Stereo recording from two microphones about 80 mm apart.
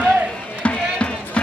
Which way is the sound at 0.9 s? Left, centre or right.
Centre.